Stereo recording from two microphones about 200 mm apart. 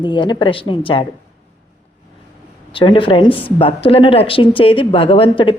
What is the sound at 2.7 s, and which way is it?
Speech, 25° left (ahead or behind).